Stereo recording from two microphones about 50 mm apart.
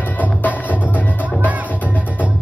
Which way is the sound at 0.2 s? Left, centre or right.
Left.